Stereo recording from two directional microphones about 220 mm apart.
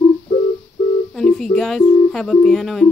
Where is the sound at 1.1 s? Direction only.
Centre (ahead or behind).